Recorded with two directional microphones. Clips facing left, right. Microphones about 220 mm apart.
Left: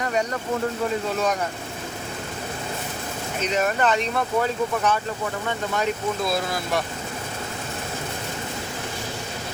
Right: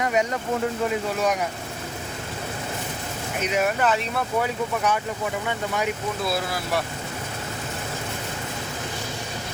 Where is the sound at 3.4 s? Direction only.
10° right (ahead or behind).